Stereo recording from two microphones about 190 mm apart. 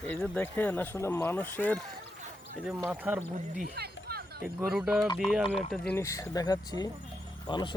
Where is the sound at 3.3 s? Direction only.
45° right (ahead or behind).